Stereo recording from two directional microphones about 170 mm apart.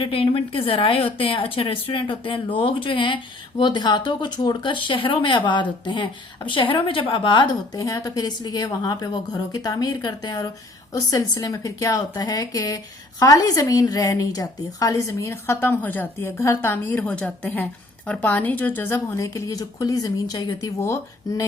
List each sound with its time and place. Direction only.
0.0 s a woman's voice: 30° left (ahead or behind)